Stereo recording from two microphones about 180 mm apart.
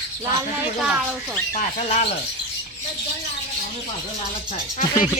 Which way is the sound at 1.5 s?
45° left (ahead or behind).